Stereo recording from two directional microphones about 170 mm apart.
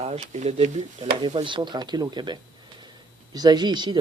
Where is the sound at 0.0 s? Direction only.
40° right (ahead or behind).